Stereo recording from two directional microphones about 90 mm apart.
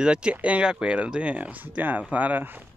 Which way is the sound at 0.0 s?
10° right (ahead or behind).